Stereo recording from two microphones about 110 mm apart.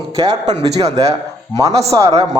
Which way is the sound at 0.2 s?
40° right (ahead or behind).